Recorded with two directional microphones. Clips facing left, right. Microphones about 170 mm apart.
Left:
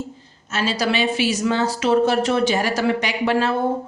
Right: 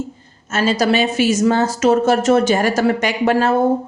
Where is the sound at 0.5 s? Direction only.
45° right (ahead or behind).